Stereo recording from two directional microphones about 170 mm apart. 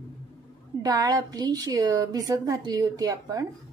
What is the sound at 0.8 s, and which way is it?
A woman's voice, 20° right (ahead or behind).